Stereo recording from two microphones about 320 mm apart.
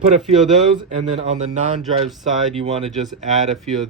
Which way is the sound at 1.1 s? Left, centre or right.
Right.